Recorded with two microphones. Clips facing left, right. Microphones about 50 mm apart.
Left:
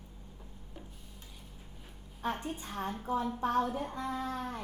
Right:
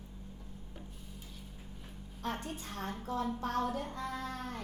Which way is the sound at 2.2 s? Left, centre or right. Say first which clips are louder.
Left 3 dB; centre.